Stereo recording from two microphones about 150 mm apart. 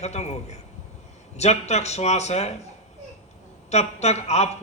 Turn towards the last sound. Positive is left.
turn(degrees=45)  # may be behind; listen again after turning